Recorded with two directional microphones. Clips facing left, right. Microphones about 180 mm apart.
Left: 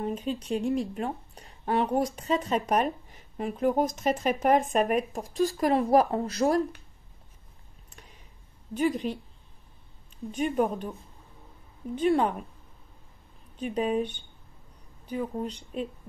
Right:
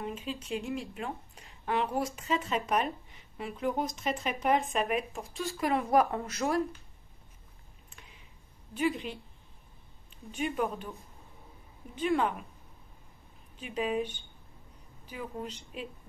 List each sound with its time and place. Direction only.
0.0 s speech: 40° left (ahead or behind)
7.9 s a sound: 40° left (ahead or behind)
8.7 s speech: 40° left (ahead or behind)
10.3 s speech: 35° left (ahead or behind)
13.6 s speech: 35° left (ahead or behind)